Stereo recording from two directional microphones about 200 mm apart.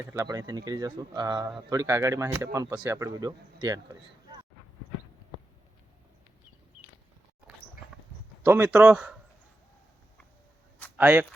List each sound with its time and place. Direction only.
0.1 s speech: 15° right (ahead or behind)
8.4 s speech: 10° right (ahead or behind)
10.9 s speech: 10° right (ahead or behind)